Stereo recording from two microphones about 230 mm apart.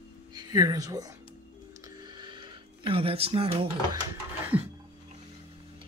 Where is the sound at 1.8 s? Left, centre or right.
Centre.